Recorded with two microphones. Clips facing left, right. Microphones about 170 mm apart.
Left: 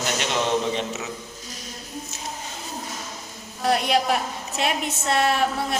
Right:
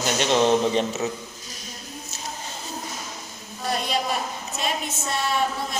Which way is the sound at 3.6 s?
70° left (ahead or behind).